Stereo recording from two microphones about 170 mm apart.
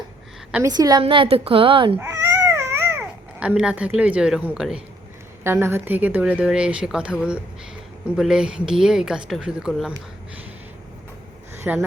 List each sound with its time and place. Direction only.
0.7 s a woman's voice: 25° right (ahead or behind)
2.0 s baby cry: 15° right (ahead or behind)
3.4 s a woman's voice: 5° right (ahead or behind)
11.6 s speech: 15° right (ahead or behind)